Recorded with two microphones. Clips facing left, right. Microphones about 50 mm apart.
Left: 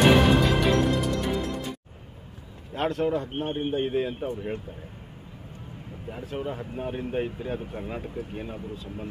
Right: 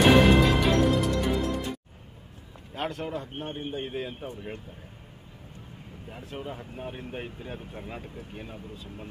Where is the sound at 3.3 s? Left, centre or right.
Left.